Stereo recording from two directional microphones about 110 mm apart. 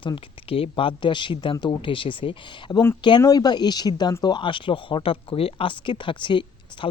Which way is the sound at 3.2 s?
35° left (ahead or behind).